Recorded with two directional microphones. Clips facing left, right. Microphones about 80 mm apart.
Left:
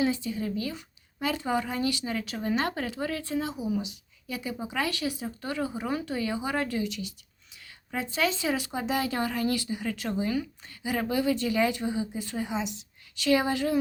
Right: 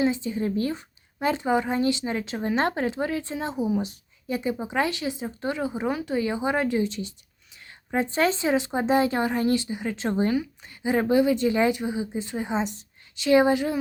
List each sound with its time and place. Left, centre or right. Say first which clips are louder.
0.0 s speech: right 3 dB; right
3.4 s speech: right 5 dB; right
13.1 s speech: right 6 dB; right